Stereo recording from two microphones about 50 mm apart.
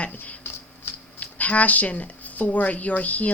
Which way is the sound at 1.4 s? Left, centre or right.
Left.